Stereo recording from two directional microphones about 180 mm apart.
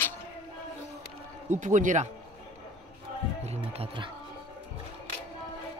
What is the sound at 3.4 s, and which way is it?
Speech, 35° right (ahead or behind).